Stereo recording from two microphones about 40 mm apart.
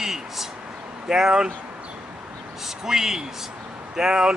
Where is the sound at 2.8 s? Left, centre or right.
Centre.